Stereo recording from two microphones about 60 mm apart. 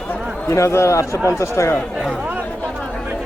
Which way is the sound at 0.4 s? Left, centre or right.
Left.